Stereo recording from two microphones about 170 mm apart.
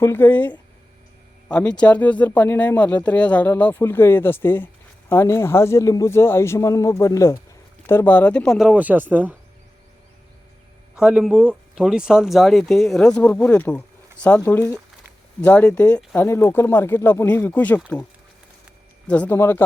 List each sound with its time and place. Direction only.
0.0 s speech: 15° left (ahead or behind); by 9.3 s 10° right (ahead or behind)
10.9 s speech: 5° right (ahead or behind)
19.0 s speech: 10° left (ahead or behind)